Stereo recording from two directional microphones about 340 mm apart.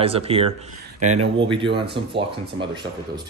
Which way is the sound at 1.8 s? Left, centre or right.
Centre.